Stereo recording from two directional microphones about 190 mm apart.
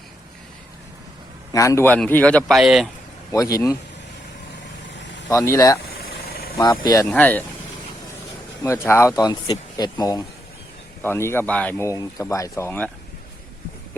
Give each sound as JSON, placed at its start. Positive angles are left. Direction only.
{"t": 1.5, "sound": "speech", "side_deg": 15}
{"t": 3.3, "sound": "speech", "side_deg": 15}
{"t": 5.3, "sound": "speech", "side_deg": 15}
{"t": 6.0, "sound": "vehicle", "side_deg": 55}
{"t": 6.6, "sound": "speech", "side_deg": 20}
{"t": 7.1, "sound": "speech", "side_deg": 10}
{"t": 8.6, "sound": "speech", "side_deg": 15}